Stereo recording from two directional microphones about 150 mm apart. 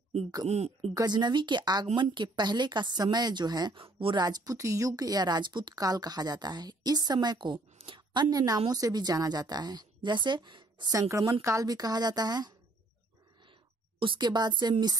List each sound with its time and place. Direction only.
0.5 s speech: 45° right (ahead or behind)
0.9 s a woman's voice: 30° right (ahead or behind)
13.9 s a woman's voice: 30° right (ahead or behind)